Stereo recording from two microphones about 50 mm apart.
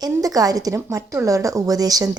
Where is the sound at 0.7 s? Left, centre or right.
Right.